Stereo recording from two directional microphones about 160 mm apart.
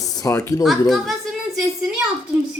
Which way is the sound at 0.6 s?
Centre (ahead or behind).